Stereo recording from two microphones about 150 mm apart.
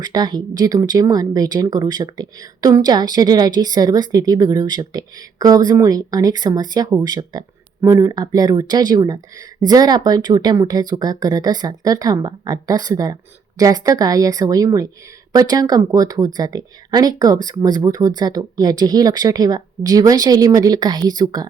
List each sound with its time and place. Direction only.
0.0 s speech: 25° right (ahead or behind)